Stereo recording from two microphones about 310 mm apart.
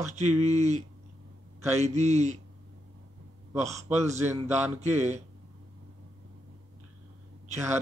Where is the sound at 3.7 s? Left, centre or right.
Right.